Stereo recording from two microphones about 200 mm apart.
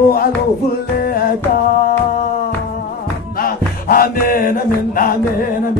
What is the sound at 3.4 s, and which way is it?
Music, 45° left (ahead or behind).